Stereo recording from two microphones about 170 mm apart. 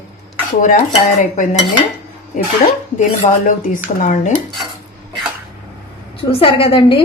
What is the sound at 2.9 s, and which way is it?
A woman's voice, 50° left (ahead or behind).